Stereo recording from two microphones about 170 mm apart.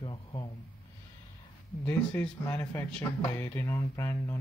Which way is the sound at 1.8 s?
10° left (ahead or behind).